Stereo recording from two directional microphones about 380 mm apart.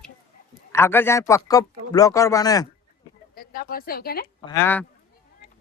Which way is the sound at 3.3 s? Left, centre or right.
Left.